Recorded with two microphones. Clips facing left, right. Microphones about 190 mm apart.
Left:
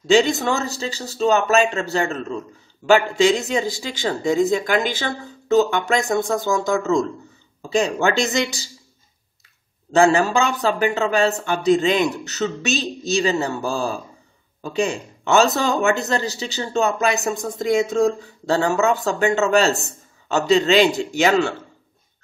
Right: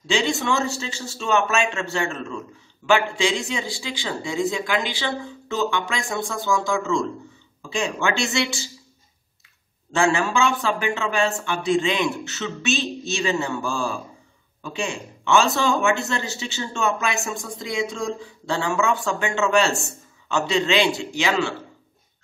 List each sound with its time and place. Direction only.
0.0 s speech: 40° left (ahead or behind)
9.9 s speech: 40° left (ahead or behind)